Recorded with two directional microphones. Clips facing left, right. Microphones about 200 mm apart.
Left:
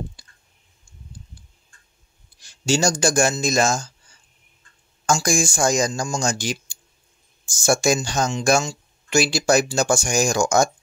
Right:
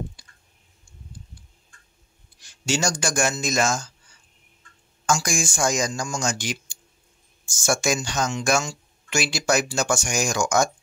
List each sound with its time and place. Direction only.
0.2 s clicking: 35° left (ahead or behind)
2.4 s speech: 35° left (ahead or behind)
5.0 s speech: 35° left (ahead or behind)